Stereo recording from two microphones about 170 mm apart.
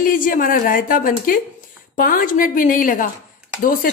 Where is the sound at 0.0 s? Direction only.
55° left (ahead or behind).